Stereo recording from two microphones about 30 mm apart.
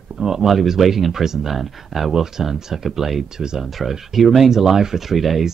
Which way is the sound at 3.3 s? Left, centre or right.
Centre.